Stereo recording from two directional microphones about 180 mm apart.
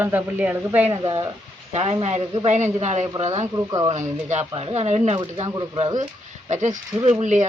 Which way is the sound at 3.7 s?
20° right (ahead or behind).